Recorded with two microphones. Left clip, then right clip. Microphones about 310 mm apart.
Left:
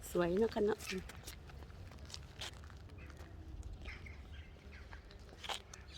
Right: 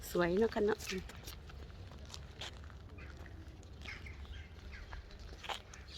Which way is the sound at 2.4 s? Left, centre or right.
Centre.